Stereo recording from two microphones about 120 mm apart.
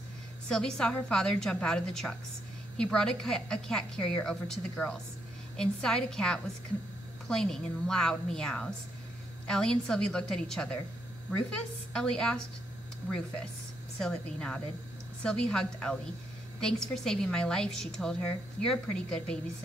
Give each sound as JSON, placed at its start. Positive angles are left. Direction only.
{"t": 0.5, "sound": "a woman's voice", "side_deg": 5}
{"t": 11.9, "sound": "a woman's voice", "side_deg": 5}
{"t": 13.9, "sound": "a woman's voice", "side_deg": 5}